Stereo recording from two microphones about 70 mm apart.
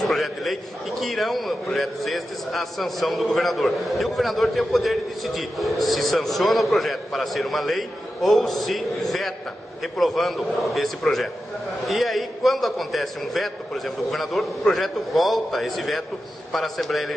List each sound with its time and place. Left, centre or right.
0.0 s a man's voice: centre